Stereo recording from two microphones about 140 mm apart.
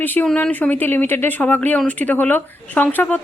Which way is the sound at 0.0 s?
15° left (ahead or behind).